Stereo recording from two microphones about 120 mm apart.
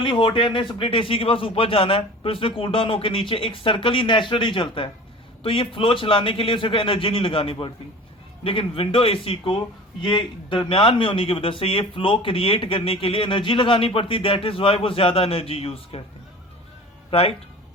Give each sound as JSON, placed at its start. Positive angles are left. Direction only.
{"t": 0.0, "sound": "a man's voice", "side_deg": 45}
{"t": 17.1, "sound": "speech", "side_deg": 55}